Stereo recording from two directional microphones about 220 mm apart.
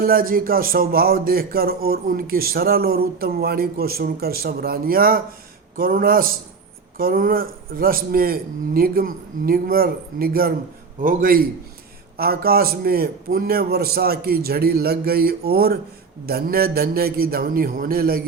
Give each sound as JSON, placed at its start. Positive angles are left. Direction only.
{"t": 0.0, "sound": "speech", "side_deg": -40}